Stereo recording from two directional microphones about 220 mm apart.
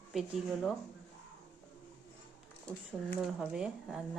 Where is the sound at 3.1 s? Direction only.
Centre (ahead or behind).